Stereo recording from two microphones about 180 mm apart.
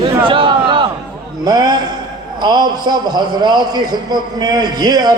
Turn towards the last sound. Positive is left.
turn(degrees=-20)  # may be behind; listen again after turning